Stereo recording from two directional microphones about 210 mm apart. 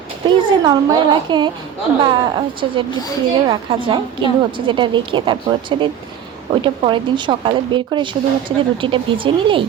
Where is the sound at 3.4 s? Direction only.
25° right (ahead or behind).